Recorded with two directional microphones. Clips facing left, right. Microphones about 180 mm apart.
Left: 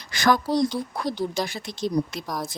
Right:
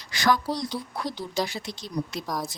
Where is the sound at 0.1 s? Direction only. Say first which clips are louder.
Left 3 dB; 50° left (ahead or behind).